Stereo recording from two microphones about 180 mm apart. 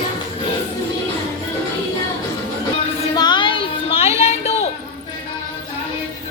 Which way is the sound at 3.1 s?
25° left (ahead or behind).